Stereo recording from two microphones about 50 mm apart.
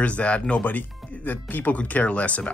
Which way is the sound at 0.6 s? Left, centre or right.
Left.